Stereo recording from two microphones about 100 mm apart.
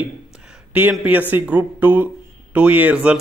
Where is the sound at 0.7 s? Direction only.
15° right (ahead or behind).